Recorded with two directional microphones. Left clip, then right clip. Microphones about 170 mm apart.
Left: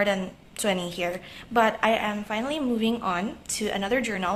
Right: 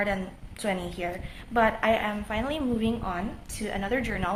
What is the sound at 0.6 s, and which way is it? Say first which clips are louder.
A woman's voice: left 4 dB; 25° left (ahead or behind).